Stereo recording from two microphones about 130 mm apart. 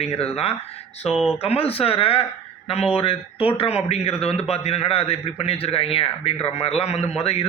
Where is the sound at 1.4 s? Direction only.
50° left (ahead or behind).